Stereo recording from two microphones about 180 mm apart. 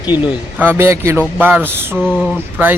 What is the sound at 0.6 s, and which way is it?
Speech, 10° right (ahead or behind).